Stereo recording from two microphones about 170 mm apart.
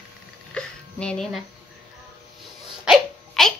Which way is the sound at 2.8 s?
Centre (ahead or behind).